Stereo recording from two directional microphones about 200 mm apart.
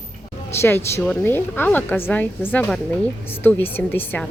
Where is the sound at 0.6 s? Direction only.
10° left (ahead or behind).